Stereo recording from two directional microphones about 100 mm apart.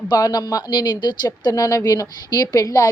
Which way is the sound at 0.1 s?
40° left (ahead or behind).